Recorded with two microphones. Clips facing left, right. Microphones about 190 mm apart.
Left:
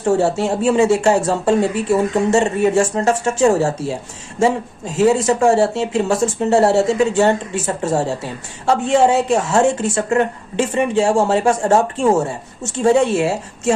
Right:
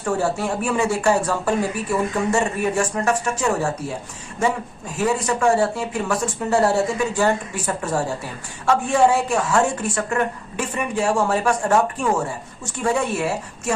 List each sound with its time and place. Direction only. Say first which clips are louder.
0.0 s speech: left 6 dB; 25° left (ahead or behind)